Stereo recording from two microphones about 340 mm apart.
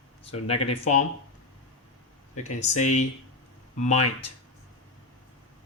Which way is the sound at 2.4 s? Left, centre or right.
Centre.